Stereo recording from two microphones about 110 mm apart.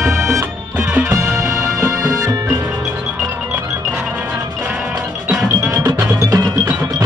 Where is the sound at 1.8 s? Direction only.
30° right (ahead or behind).